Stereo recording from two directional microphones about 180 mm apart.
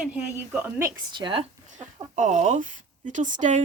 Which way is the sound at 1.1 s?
30° right (ahead or behind).